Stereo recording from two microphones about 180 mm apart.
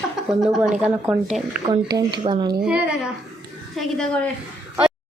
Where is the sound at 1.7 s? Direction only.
25° right (ahead or behind).